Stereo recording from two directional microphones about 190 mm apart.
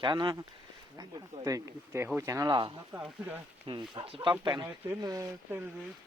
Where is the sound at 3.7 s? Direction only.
25° right (ahead or behind).